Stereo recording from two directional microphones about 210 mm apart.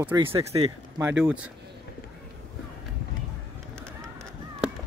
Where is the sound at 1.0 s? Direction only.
10° right (ahead or behind).